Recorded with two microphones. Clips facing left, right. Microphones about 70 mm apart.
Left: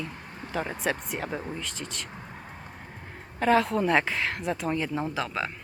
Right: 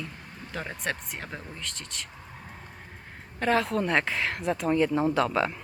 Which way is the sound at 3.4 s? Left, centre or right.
Centre.